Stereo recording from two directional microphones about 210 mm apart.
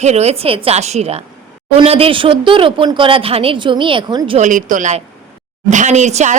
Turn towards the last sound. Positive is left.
turn(degrees=-35)  # may be behind; listen again after turning